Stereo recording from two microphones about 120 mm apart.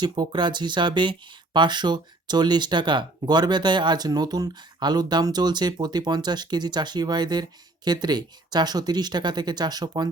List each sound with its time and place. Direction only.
0.0 s speech: 40° right (ahead or behind)